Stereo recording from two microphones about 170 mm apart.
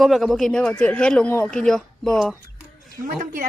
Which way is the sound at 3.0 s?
50° right (ahead or behind).